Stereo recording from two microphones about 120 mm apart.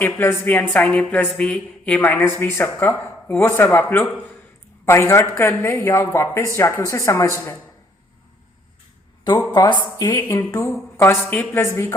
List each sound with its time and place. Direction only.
0.0 s a woman's voice: 20° left (ahead or behind)
9.5 s a woman's voice: 40° left (ahead or behind)
10.1 s a woman's voice: 20° left (ahead or behind)